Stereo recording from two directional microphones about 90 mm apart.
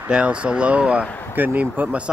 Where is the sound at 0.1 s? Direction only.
10° right (ahead or behind).